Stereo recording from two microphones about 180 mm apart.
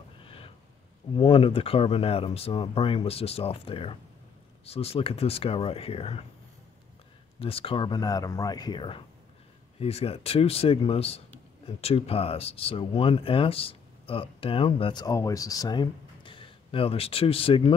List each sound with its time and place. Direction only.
0.2 s a sound: 30° left (ahead or behind)
1.1 s speech: 30° left (ahead or behind)
7.3 s speech: 30° left (ahead or behind)